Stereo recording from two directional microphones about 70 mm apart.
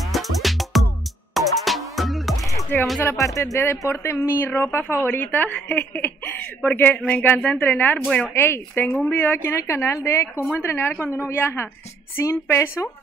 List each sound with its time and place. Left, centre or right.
0.1 s music: centre
2.7 s a woman's voice: left
3.2 s a woman's voice: left
8.8 s a woman's voice: centre
9.2 s a woman's voice: left